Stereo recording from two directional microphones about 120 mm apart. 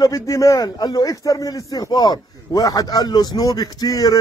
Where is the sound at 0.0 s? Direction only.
30° left (ahead or behind).